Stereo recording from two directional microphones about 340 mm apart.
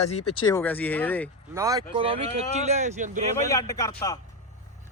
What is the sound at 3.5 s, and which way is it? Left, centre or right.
Speech, centre.